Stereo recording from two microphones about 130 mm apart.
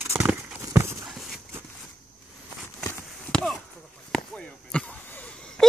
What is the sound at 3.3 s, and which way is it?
Chop, centre (ahead or behind).